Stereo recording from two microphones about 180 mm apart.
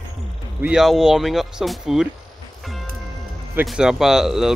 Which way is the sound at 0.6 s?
5° right (ahead or behind).